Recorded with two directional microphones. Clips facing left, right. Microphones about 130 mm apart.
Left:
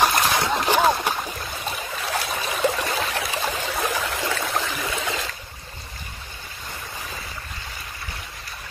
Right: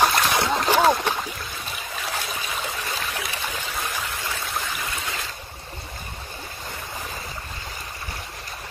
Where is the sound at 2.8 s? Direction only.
80° left.